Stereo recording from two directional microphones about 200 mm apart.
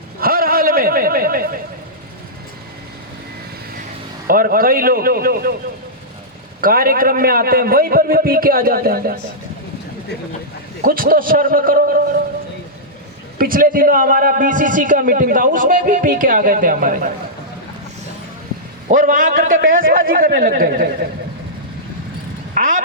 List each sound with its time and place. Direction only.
0.2 s a sound: 45° right (ahead or behind)
4.3 s a man's voice: 45° right (ahead or behind)
6.6 s a man's voice: 45° right (ahead or behind)
10.8 s a man's voice: 45° right (ahead or behind)
13.4 s a man's voice: 45° right (ahead or behind)
18.9 s a man's voice: 40° right (ahead or behind)
22.5 s speech: 40° right (ahead or behind)